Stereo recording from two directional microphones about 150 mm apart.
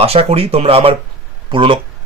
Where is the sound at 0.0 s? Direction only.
40° right (ahead or behind).